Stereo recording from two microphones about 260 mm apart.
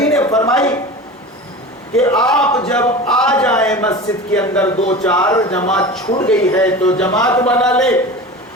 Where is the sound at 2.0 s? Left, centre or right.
Centre.